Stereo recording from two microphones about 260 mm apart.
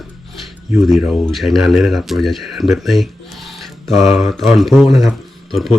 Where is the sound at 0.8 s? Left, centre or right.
Centre.